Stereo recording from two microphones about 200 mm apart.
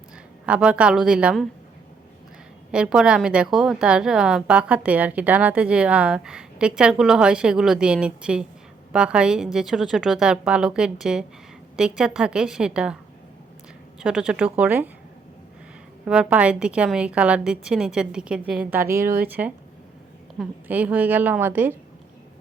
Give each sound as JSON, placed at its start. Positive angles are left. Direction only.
{"t": 0.4, "sound": "a woman's voice", "side_deg": -5}
{"t": 2.7, "sound": "a woman's voice", "side_deg": -5}
{"t": 14.0, "sound": "a woman's voice", "side_deg": -5}
{"t": 16.0, "sound": "a woman's voice", "side_deg": -5}
{"t": 19.0, "sound": "speech", "side_deg": -45}
{"t": 19.3, "sound": "a woman's voice", "side_deg": -10}